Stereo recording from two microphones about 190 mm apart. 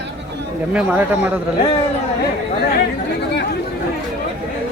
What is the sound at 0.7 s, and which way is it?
Speech, 10° right (ahead or behind).